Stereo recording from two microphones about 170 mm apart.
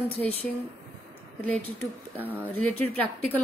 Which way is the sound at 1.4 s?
10° left (ahead or behind).